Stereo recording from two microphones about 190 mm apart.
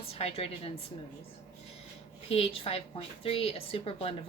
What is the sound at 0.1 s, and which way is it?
Speech, 30° left (ahead or behind).